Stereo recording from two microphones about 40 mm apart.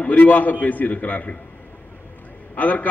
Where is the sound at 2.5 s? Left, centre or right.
Left.